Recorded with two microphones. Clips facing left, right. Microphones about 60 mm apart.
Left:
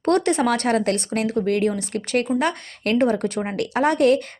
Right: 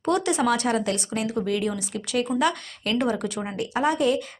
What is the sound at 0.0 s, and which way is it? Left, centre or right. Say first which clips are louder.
Speech: left 4 dB; left.